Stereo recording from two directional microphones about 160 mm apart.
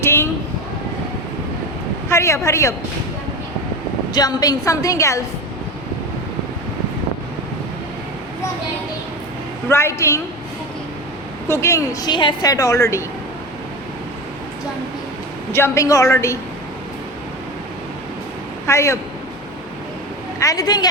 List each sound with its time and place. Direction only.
0.0 s a sound: 15° left (ahead or behind)
2.0 s a woman's voice: 15° left (ahead or behind)
4.1 s speech: 25° left (ahead or behind)
9.6 s a woman's voice: 15° left (ahead or behind)
11.4 s speech: 15° left (ahead or behind)
15.5 s a woman's voice: 15° left (ahead or behind)
18.6 s speech: 15° left (ahead or behind)
20.4 s speech: 20° left (ahead or behind)